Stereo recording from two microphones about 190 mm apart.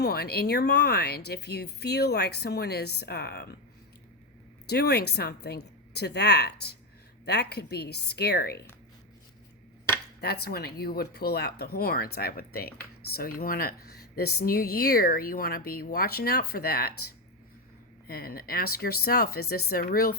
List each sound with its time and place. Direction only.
0.0 s a woman's voice: 55° left (ahead or behind)
4.7 s a woman's voice: 60° left (ahead or behind)
10.2 s a woman's voice: 55° left (ahead or behind)
18.1 s speech: 50° left (ahead or behind)